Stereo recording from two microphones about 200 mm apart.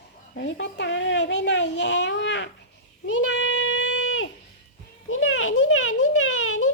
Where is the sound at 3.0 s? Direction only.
70° left (ahead or behind); by 6.7 s 90° left.